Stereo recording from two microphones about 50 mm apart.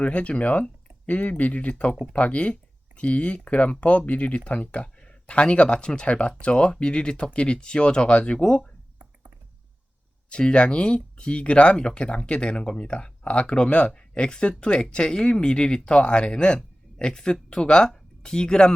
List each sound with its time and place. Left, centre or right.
0.0 s speech: left
10.2 s speech: centre